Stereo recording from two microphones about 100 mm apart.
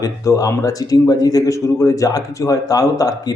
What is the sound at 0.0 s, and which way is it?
A man's voice, 35° left (ahead or behind).